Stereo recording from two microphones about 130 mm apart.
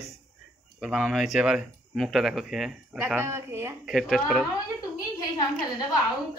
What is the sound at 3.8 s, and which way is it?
Speech, centre (ahead or behind).